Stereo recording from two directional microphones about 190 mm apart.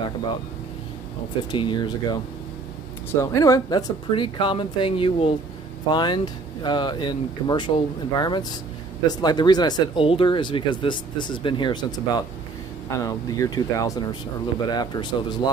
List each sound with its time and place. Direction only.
1.5 s speech: 25° left (ahead or behind)
3.2 s speech: 15° left (ahead or behind)